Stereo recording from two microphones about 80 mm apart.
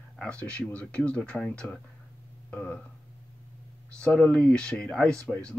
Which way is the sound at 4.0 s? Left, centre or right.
Centre.